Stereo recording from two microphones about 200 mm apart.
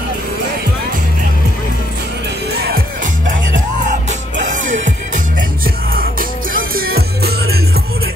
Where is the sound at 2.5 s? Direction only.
50° right (ahead or behind).